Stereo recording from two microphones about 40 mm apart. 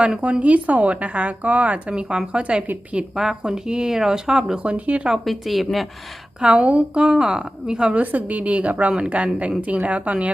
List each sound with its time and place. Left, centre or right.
0.2 s a woman's voice: right
1.9 s a woman's voice: right
3.2 s speech: centre
4.6 s a woman's voice: right
5.2 s speech: centre
6.4 s a woman's voice: right
8.0 s a woman's voice: right